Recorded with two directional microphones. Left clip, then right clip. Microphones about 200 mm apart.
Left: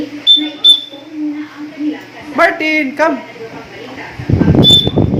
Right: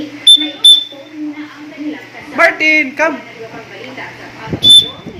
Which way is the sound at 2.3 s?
15° left (ahead or behind).